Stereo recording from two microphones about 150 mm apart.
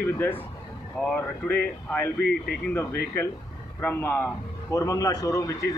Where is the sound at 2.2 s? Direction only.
90° left.